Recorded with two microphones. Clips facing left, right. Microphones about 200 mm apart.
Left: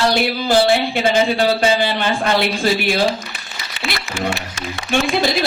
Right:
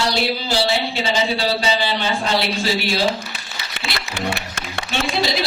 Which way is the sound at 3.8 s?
55° right (ahead or behind).